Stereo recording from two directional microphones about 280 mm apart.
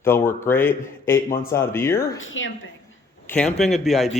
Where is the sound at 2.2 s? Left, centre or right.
Left.